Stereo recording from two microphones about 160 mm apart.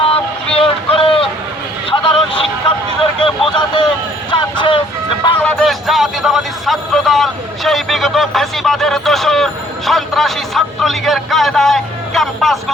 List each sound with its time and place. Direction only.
0.0 s vehicle: 35° left (ahead or behind)
5.4 s speech: 5° left (ahead or behind)